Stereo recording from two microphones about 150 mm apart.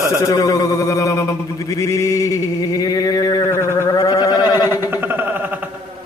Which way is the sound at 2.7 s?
25° left (ahead or behind).